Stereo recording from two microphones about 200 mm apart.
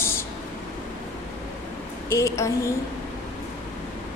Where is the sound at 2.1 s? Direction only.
15° left (ahead or behind).